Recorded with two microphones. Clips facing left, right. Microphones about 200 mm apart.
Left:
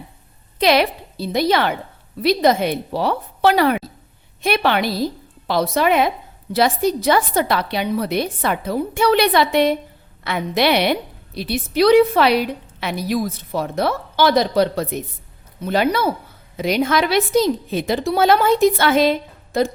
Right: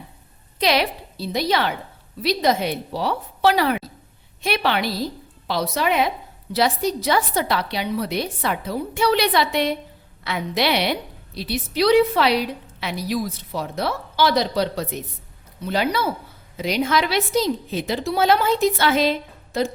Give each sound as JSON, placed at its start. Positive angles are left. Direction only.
{"t": 0.6, "sound": "a woman's voice", "side_deg": 55}